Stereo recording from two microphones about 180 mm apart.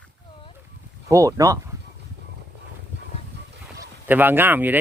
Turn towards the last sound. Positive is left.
turn(degrees=-10)  # may be behind; listen again after turning